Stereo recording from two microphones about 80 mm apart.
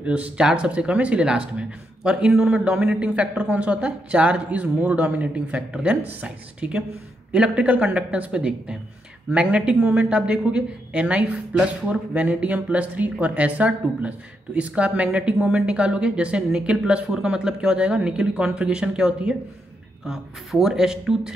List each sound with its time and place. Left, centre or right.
0.0 s speech: centre